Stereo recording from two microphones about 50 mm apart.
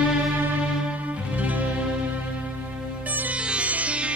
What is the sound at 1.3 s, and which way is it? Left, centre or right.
Music, right.